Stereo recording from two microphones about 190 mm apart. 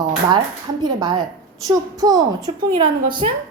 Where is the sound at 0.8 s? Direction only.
20° right (ahead or behind).